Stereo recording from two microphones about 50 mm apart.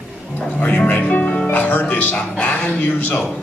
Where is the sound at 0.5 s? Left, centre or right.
Left.